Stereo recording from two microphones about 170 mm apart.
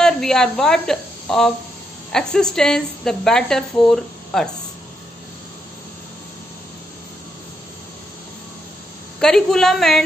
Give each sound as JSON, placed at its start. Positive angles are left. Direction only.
{"t": 0.0, "sound": "speech", "side_deg": 5}
{"t": 9.2, "sound": "speech", "side_deg": 5}